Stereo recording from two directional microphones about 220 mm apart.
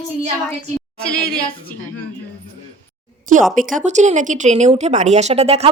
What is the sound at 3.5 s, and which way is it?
Speech, 35° right (ahead or behind).